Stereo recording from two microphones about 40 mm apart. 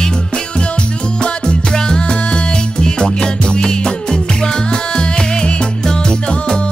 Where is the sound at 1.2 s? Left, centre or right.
Left.